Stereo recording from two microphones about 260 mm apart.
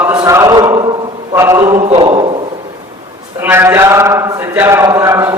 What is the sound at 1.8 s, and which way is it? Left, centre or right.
Speech, right.